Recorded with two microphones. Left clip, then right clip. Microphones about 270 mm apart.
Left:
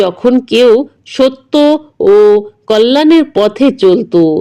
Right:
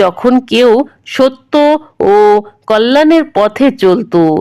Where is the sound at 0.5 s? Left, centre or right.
Right.